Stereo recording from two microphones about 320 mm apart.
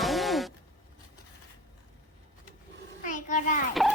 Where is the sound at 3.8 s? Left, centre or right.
Centre.